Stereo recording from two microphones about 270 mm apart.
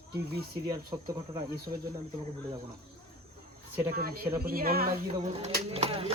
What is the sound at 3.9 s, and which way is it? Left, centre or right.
Speech, right.